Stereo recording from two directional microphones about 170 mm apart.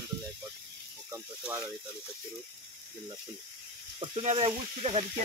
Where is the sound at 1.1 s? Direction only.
10° right (ahead or behind).